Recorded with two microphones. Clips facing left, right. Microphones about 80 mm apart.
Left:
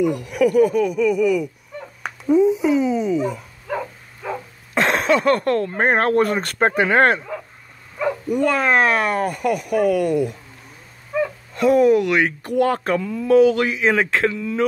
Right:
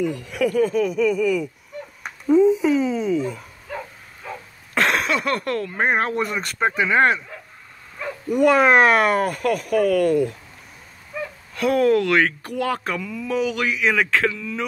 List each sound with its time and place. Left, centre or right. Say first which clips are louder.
0.0 s speech: left 4 dB; centre
4.7 s speech: left 3 dB; left
8.3 s speech: right 4 dB; centre
11.5 s speech: left 3 dB; left
12.5 s speech: left 7 dB; left